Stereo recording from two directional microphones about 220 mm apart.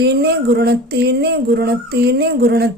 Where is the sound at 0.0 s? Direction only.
50° right (ahead or behind).